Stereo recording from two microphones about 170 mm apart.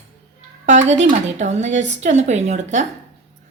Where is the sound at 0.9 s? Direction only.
45° right (ahead or behind).